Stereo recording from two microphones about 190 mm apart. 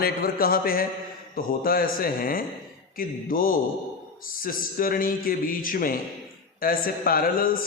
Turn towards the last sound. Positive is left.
turn(degrees=50)  # may be behind; listen again after turning